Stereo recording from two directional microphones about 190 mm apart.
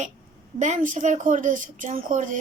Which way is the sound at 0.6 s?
40° right (ahead or behind).